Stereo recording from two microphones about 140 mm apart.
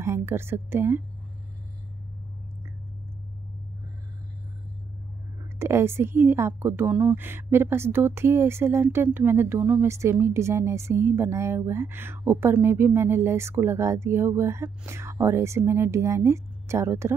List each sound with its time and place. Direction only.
0.0 s speech: 20° right (ahead or behind)
5.6 s a woman's voice: 20° right (ahead or behind)